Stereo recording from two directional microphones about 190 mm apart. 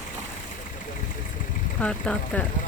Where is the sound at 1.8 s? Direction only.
5° left (ahead or behind).